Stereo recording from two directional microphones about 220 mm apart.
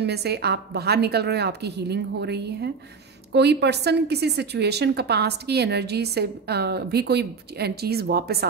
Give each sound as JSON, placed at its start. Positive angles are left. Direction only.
{"t": 0.0, "sound": "a woman's voice", "side_deg": -50}